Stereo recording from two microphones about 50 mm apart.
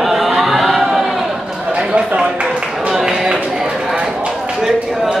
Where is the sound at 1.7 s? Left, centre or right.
Right.